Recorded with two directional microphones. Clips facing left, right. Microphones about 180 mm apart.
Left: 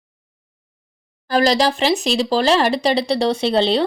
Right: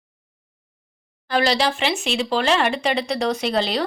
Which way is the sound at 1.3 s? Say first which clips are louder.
Left 4 dB; 40° left (ahead or behind).